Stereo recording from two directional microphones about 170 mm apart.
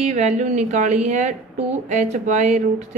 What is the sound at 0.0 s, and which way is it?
A woman's voice, 40° right (ahead or behind).